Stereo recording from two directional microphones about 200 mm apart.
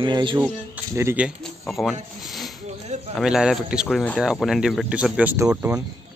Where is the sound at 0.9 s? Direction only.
10° right (ahead or behind).